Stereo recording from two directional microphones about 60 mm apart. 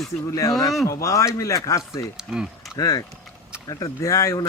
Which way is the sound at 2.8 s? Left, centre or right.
Left.